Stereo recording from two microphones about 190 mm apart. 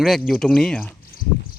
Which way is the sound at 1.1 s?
50° left (ahead or behind).